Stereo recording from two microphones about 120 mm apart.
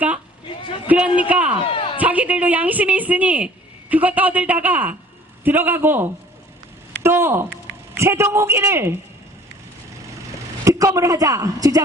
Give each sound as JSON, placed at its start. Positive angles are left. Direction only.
{"t": 0.9, "sound": "a woman's voice", "side_deg": -10}
{"t": 1.6, "sound": "a sound", "side_deg": 45}
{"t": 2.0, "sound": "a woman's voice", "side_deg": -15}
{"t": 10.6, "sound": "a woman's voice", "side_deg": -25}